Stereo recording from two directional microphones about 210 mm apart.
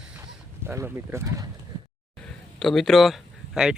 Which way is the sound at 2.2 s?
5° left (ahead or behind).